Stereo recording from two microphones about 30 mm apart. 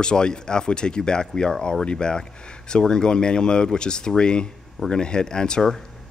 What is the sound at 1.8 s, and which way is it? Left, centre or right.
Speech, left.